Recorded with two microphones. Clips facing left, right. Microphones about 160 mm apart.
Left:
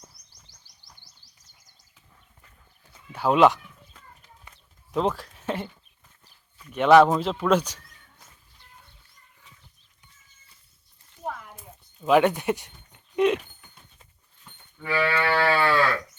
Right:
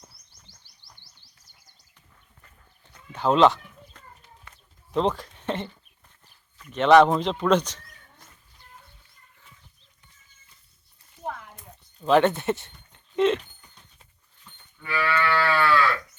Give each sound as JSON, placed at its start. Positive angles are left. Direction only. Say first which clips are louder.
{"t": 3.1, "sound": "chicken", "louder": "even", "side_deg": 10}
{"t": 4.9, "sound": "speech", "louder": "right 1 dB", "side_deg": 5}
{"t": 11.2, "sound": "a sound", "louder": "even", "side_deg": 5}
{"t": 14.8, "sound": "livestock", "louder": "left 1 dB", "side_deg": 30}
{"t": 15.5, "sound": "sheep", "louder": "even", "side_deg": 30}